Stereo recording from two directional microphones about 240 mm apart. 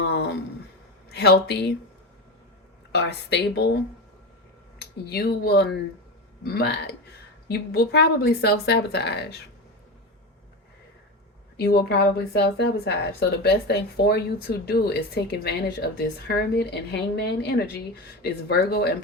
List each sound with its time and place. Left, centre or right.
0.0 s a woman's voice: left
2.9 s a woman's voice: left
5.0 s a woman's voice: left
11.5 s a woman's voice: left